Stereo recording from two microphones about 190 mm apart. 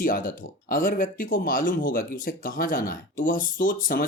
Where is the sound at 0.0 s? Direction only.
45° left (ahead or behind).